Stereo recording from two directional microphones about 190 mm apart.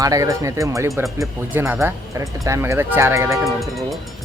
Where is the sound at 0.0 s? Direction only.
20° right (ahead or behind).